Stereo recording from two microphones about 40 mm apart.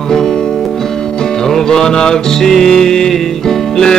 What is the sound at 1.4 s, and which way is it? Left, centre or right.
Music, centre.